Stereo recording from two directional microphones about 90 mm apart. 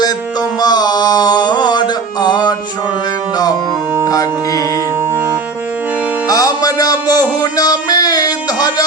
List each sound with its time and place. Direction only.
0.6 s mantra: 50° left (ahead or behind)
2.2 s music: 50° left (ahead or behind)
4.1 s music: 40° left (ahead or behind)
5.1 s music: 25° right (ahead or behind)
6.2 s music: 45° left (ahead or behind)
7.5 s a sound: 45° left (ahead or behind)